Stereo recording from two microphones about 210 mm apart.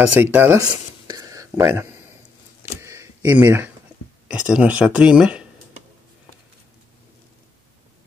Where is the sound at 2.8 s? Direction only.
10° right (ahead or behind).